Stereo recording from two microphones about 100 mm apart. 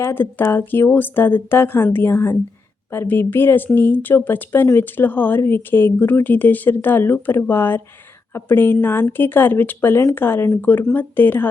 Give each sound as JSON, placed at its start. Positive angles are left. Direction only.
{"t": 0.0, "sound": "speech", "side_deg": 20}